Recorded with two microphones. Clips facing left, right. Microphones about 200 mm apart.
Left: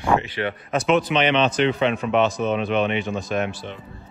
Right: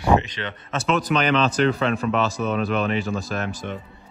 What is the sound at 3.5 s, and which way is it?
Speech, 45° right (ahead or behind).